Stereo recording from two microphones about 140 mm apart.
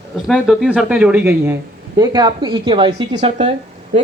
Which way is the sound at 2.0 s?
30° right (ahead or behind).